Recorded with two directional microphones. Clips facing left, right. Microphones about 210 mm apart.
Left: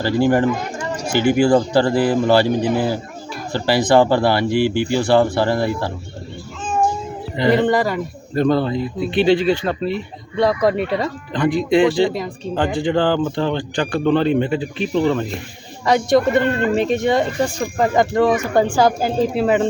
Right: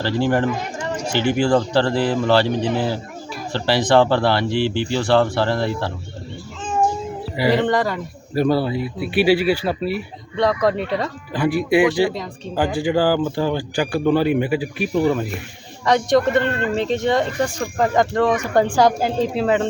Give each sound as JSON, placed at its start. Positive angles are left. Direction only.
{"t": 0.3, "sound": "speech", "side_deg": 10}
{"t": 4.5, "sound": "speech", "side_deg": 50}
{"t": 4.9, "sound": "speech", "side_deg": 10}
{"t": 7.5, "sound": "speech", "side_deg": 5}
{"t": 8.4, "sound": "speech", "side_deg": -10}
{"t": 10.3, "sound": "speech", "side_deg": 10}
{"t": 11.3, "sound": "speech", "side_deg": -5}
{"t": 15.8, "sound": "speech", "side_deg": 10}